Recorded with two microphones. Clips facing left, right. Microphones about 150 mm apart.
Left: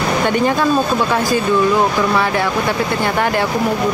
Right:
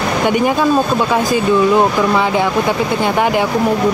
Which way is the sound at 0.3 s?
15° right (ahead or behind).